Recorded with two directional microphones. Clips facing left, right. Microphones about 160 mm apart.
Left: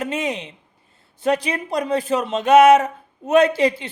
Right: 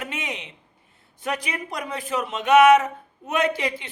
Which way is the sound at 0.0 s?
35° left (ahead or behind).